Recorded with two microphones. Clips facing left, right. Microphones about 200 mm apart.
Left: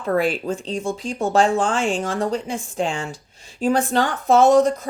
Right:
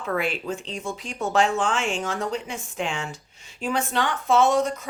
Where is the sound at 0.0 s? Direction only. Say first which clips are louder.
Left 6 dB; 40° left (ahead or behind).